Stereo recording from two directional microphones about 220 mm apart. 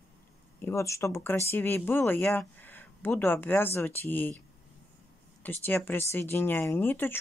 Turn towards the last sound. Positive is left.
turn(degrees=10)  # may be behind; listen again after turning